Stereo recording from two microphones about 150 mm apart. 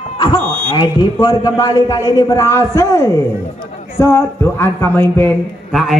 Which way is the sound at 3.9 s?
20° left (ahead or behind).